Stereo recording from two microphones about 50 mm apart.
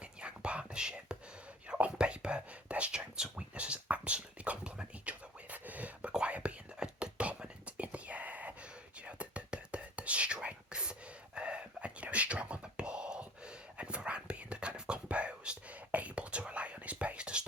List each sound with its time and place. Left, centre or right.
0.2 s whispering: right